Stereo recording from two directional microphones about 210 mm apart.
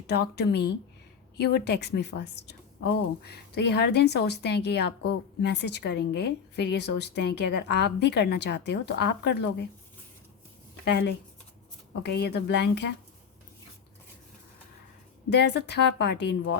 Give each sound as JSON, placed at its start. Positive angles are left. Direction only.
{"t": 0.1, "sound": "a woman's voice", "side_deg": 50}
{"t": 10.8, "sound": "a woman's voice", "side_deg": 55}
{"t": 15.3, "sound": "a woman's voice", "side_deg": 55}